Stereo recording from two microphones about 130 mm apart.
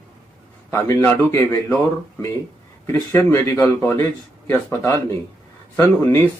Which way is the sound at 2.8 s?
20° left (ahead or behind).